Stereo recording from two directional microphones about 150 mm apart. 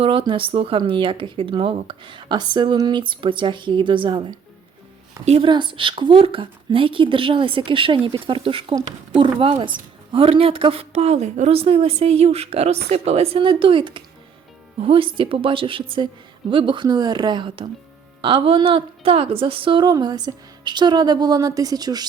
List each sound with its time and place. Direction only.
0.0 s speech: 35° right (ahead or behind)
5.2 s a woman's voice: 45° right (ahead or behind)
5.5 s a woman's voice: 30° right (ahead or behind)